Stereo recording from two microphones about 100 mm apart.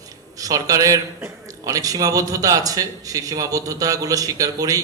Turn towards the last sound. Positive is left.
turn(degrees=-35)  # may be behind; listen again after turning